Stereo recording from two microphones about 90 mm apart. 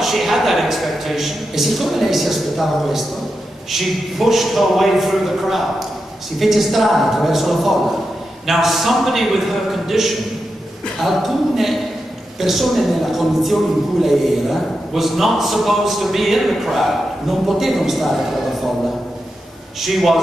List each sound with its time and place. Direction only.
0.0 s a woman's voice: centre (ahead or behind)
19.8 s a woman's voice: centre (ahead or behind)